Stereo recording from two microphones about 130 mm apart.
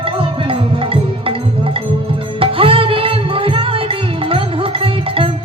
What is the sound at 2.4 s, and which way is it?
Music, 45° right (ahead or behind).